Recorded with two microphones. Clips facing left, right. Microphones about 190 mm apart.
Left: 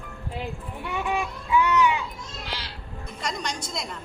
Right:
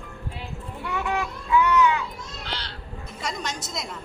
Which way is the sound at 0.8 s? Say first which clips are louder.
Even; 15° left (ahead or behind).